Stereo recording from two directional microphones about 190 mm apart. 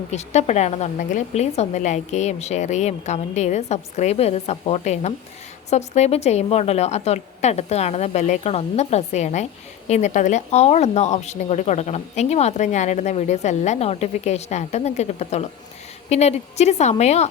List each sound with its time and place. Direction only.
0.1 s speech: 35° left (ahead or behind)